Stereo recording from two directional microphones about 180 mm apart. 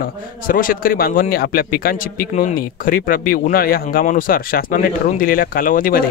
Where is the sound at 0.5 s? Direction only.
50° left (ahead or behind).